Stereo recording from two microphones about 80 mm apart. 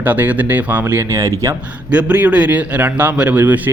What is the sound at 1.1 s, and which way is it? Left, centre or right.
Speech, right.